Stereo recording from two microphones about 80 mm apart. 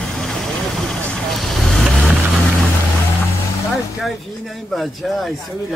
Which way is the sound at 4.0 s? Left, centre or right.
Centre.